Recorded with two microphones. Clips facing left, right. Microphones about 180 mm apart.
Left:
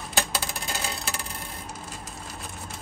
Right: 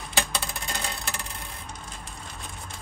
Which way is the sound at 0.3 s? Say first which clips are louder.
Left 1 dB; 5° left (ahead or behind).